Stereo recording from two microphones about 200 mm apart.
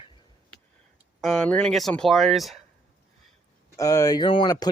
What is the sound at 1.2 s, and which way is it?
Speech, centre (ahead or behind).